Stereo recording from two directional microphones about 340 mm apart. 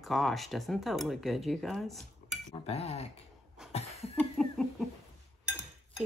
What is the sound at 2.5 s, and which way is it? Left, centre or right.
Speech, centre.